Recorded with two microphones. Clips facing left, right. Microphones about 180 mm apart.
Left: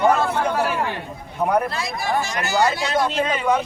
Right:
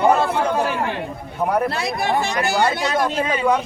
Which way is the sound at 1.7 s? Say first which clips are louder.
Right 4 dB; 60° right (ahead or behind).